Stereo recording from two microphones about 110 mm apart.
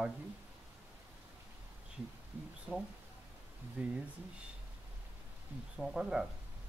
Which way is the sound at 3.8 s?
15° right (ahead or behind).